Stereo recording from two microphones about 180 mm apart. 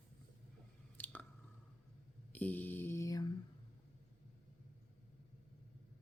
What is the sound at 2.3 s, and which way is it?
Speech, 10° left (ahead or behind).